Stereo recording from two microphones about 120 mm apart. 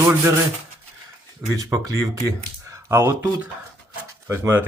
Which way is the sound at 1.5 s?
30° right (ahead or behind).